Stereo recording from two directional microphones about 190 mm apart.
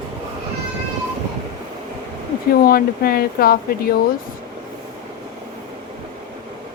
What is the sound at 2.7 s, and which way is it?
Speech, 50° left (ahead or behind).